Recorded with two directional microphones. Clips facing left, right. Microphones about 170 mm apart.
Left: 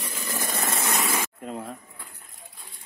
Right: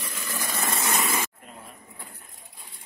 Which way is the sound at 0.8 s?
90° left.